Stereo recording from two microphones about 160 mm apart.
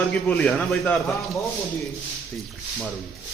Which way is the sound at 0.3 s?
5° left (ahead or behind).